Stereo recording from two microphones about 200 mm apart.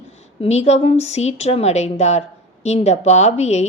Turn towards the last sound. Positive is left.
turn(degrees=35)  # may be behind; listen again after turning